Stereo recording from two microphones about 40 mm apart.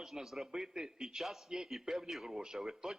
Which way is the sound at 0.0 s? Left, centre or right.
Centre.